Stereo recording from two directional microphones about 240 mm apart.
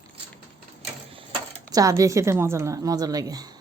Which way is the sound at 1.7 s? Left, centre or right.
Centre.